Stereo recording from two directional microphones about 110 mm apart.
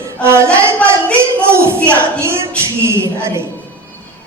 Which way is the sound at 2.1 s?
25° right (ahead or behind).